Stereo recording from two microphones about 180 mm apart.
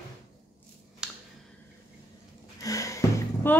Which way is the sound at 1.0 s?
5° right (ahead or behind).